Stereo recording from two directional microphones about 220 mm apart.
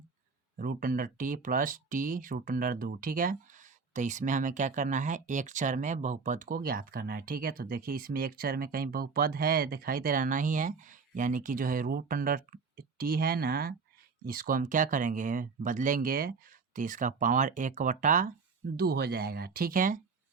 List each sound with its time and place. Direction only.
0.5 s speech: 40° right (ahead or behind)